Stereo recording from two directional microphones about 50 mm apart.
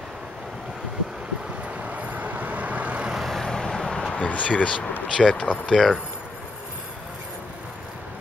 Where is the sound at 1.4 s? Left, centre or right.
Right.